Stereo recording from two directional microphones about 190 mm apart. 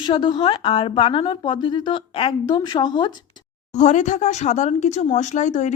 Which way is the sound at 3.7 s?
40° left (ahead or behind).